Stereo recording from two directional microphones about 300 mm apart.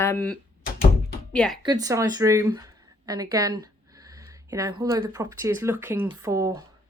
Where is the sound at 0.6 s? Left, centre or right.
Left.